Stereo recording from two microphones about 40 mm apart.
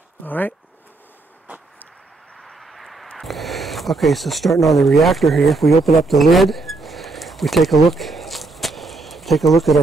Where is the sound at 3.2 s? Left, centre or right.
Centre.